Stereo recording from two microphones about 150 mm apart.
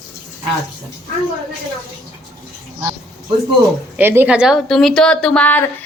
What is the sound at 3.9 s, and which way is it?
A woman's voice, 15° right (ahead or behind).